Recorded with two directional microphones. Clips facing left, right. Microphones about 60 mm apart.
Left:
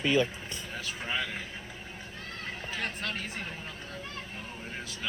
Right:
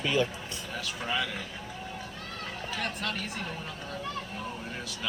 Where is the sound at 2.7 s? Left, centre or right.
Left.